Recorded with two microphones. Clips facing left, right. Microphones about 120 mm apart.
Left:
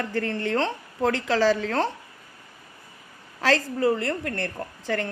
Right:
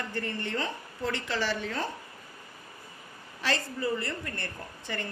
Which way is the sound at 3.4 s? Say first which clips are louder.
Left 9 dB; 90° left.